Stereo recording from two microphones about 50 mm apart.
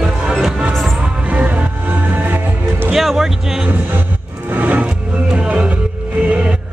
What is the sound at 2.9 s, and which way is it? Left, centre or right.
Music, centre.